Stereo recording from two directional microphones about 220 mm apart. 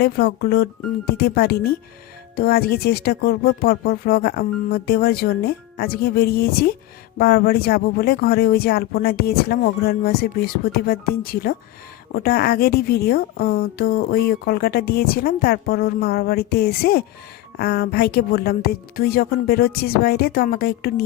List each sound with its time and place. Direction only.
0.0 s a woman's voice: 45° left (ahead or behind)